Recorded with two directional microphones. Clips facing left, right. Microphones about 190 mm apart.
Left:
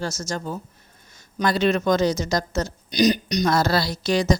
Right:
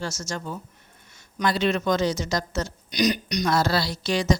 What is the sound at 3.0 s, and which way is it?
Speech, 30° left (ahead or behind).